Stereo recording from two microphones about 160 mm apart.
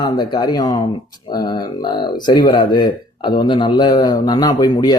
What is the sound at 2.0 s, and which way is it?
Speech, 30° left (ahead or behind).